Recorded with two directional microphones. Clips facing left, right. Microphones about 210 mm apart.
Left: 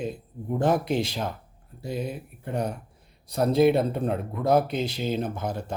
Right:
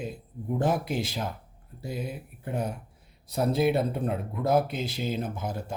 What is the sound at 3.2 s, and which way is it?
Speech, 5° right (ahead or behind).